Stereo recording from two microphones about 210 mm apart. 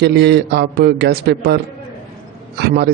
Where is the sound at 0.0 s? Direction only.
55° right (ahead or behind).